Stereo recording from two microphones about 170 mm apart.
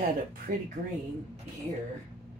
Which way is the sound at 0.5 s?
55° right (ahead or behind).